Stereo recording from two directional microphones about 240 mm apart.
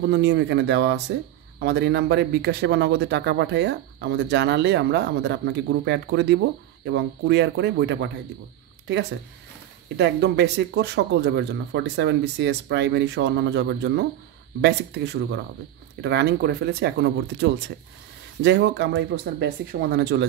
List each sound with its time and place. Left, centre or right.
0.0 s a man's voice: right
9.9 s a man's voice: right